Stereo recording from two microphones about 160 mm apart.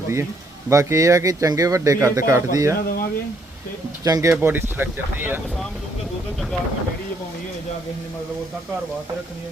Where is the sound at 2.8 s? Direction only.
70° left (ahead or behind).